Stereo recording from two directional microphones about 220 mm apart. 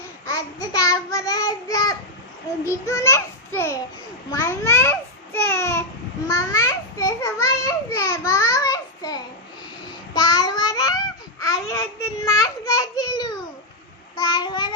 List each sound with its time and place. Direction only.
0.3 s child singing: 15° left (ahead or behind)
2.6 s a child's voice: 15° left (ahead or behind)
10.2 s child singing: 15° left (ahead or behind)
12.2 s a child's voice: 15° left (ahead or behind)